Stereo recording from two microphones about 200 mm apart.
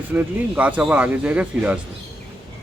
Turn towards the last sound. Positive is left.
turn(degrees=-5)  # may be behind; listen again after turning